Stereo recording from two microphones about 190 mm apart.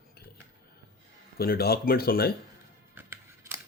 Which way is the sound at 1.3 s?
55° left (ahead or behind).